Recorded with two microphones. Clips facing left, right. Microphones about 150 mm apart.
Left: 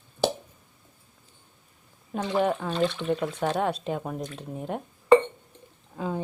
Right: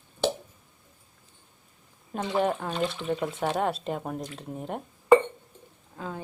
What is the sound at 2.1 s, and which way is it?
Speech, 5° right (ahead or behind).